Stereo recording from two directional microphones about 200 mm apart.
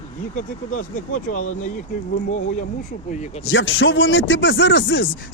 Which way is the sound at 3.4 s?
75° left (ahead or behind).